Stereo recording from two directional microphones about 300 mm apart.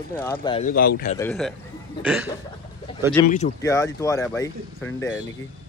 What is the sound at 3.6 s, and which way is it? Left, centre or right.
Speech, centre.